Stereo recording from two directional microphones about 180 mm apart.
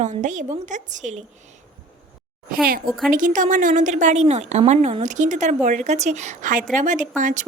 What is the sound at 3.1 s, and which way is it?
A woman's voice, 45° right (ahead or behind).